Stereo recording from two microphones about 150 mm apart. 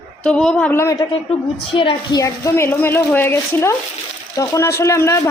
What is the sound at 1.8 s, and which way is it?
Speech, 35° left (ahead or behind).